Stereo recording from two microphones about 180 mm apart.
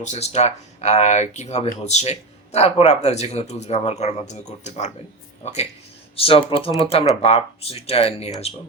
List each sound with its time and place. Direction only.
0.0 s speech: 40° left (ahead or behind)